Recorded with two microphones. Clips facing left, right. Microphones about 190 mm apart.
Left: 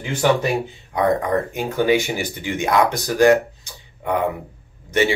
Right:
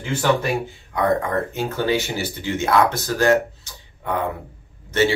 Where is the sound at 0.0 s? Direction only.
15° left (ahead or behind).